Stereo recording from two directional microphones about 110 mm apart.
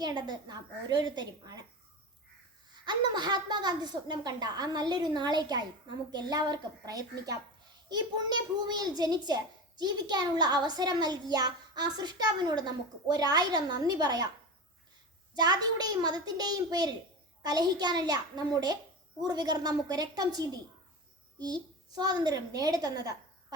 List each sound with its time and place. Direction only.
0.0 s a child's voice: 40° right (ahead or behind)
2.8 s a child's voice: 40° right (ahead or behind)
15.4 s a child's voice: 35° right (ahead or behind)